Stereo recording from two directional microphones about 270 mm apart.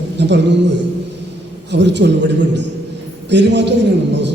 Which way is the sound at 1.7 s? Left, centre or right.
Right.